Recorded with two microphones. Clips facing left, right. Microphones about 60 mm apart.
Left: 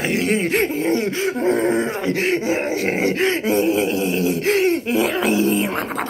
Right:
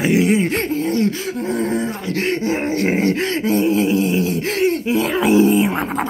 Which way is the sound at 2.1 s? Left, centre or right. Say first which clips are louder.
Right 2 dB; centre.